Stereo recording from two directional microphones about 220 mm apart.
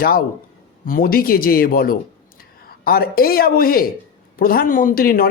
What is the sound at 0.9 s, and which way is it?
A man's voice, 40° left (ahead or behind).